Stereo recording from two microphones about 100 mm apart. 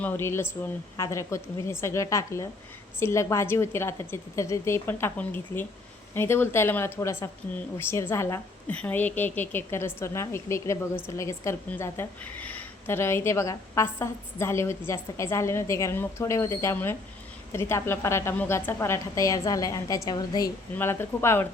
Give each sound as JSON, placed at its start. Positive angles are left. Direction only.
{"t": 0.0, "sound": "a woman's voice", "side_deg": 25}
{"t": 8.7, "sound": "a woman's voice", "side_deg": 15}
{"t": 20.7, "sound": "a woman's voice", "side_deg": 20}